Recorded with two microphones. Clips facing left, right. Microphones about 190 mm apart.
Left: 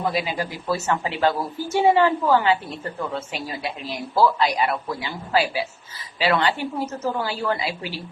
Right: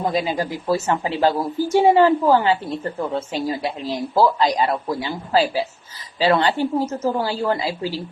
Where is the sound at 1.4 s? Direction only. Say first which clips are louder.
Right 6 dB; 15° right (ahead or behind).